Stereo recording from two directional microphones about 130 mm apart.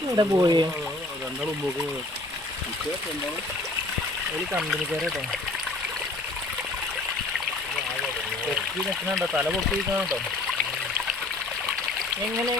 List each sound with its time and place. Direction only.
0.2 s speech: 30° right (ahead or behind)
4.5 s speech: centre (ahead or behind)